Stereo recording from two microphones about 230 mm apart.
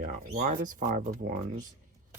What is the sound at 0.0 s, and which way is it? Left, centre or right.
Speech, right.